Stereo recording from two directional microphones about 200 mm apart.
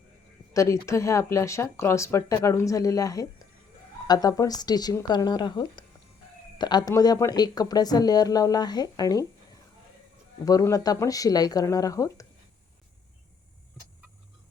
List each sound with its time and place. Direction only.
0.5 s speech: 15° left (ahead or behind)
10.4 s speech: 15° left (ahead or behind)